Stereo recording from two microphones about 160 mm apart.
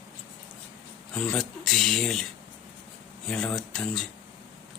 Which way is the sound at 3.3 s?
5° left (ahead or behind).